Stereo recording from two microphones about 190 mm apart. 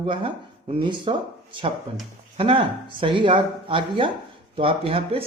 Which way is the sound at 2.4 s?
25° right (ahead or behind).